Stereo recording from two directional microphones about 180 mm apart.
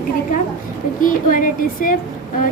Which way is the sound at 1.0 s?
50° left (ahead or behind).